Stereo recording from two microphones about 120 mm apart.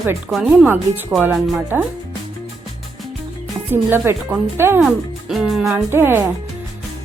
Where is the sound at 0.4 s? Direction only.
15° right (ahead or behind).